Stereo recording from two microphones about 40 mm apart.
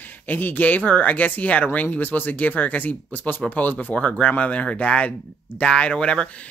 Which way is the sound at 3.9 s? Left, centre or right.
Left.